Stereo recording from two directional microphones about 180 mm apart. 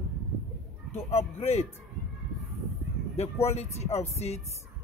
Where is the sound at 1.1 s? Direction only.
35° left (ahead or behind).